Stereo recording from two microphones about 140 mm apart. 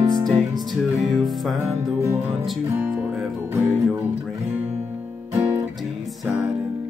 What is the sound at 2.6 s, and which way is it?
Music, 15° right (ahead or behind).